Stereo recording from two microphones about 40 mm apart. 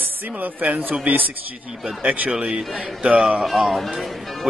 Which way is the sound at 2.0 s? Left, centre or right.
Right.